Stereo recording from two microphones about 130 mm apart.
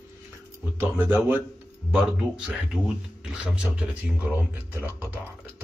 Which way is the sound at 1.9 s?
5° right (ahead or behind).